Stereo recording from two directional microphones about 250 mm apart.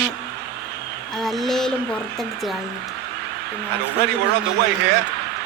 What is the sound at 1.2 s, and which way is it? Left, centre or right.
Speech, centre.